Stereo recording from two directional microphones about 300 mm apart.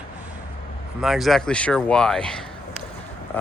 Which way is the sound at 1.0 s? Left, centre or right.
Centre.